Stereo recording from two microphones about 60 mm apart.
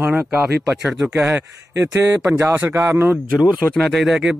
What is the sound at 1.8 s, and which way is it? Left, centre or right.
A man's voice, right.